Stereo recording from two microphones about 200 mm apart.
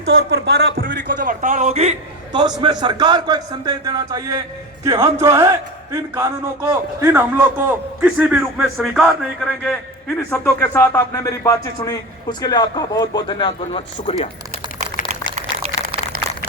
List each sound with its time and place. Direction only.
0.0 s speech: 70° right (ahead or behind)
1.2 s a man's voice: 40° right (ahead or behind); by 9.0 s centre (ahead or behind)
10.2 s speech: 15° left (ahead or behind); by 14.3 s 30° left (ahead or behind)
15.4 s a sound: 30° right (ahead or behind)